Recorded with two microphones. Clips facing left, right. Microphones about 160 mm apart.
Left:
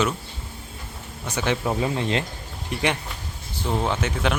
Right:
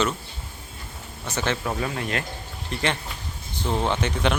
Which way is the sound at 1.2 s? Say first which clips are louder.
Left 2 dB; 10° left (ahead or behind).